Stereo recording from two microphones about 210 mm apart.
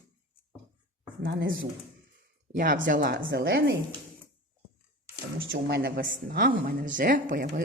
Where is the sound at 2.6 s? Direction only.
40° right (ahead or behind).